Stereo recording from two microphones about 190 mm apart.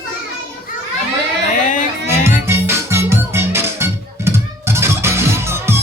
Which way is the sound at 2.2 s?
15° right (ahead or behind).